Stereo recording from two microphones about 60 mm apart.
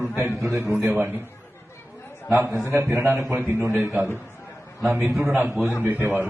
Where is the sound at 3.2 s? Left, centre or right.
Right.